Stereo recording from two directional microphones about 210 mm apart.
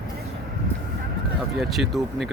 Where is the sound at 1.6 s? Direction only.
Centre (ahead or behind).